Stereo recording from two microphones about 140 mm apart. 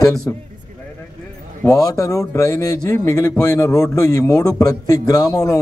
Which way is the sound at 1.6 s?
25° left (ahead or behind).